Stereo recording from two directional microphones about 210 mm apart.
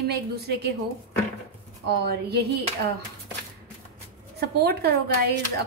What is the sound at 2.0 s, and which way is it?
Speech, 50° right (ahead or behind).